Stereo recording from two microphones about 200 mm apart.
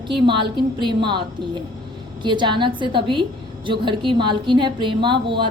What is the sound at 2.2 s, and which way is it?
A woman's voice, 25° right (ahead or behind).